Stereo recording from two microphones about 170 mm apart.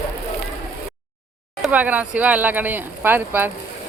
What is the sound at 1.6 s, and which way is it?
Speech, 10° right (ahead or behind).